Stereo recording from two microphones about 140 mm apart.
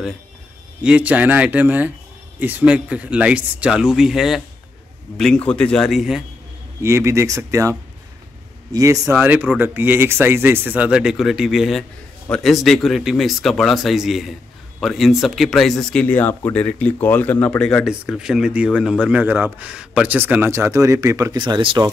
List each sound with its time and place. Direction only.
0.8 s speech: 10° right (ahead or behind)
6.8 s speech: 20° right (ahead or behind)
8.7 s speech: 25° right (ahead or behind)
9.2 s speech: 10° right (ahead or behind); by 21.9 s 35° right (ahead or behind)